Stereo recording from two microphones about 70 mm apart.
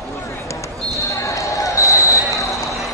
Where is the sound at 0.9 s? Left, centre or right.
Left.